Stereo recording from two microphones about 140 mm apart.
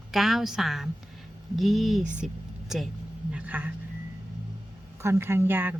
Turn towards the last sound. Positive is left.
turn(degrees=-15)  # may be behind; listen again after turning